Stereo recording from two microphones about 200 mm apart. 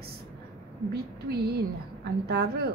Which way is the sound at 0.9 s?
50° right (ahead or behind).